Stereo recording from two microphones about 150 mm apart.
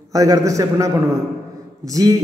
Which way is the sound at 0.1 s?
20° right (ahead or behind).